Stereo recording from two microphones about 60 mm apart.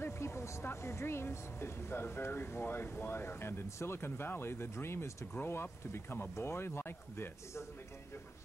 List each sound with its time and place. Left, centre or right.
0.0 s speech: left